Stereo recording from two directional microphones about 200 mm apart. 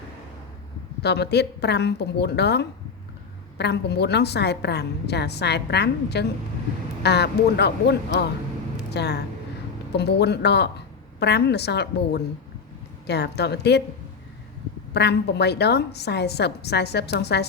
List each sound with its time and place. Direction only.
1.0 s a woman's voice: 55° left (ahead or behind)
14.9 s a woman's voice: 55° left (ahead or behind)